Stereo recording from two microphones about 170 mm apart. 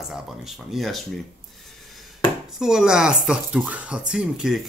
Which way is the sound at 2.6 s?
5° right (ahead or behind).